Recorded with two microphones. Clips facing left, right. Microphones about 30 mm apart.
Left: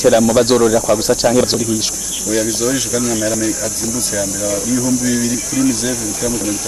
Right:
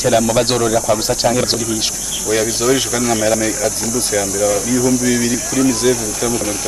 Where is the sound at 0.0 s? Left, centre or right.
Centre.